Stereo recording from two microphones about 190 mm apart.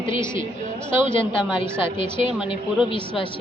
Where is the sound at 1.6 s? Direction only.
25° left (ahead or behind).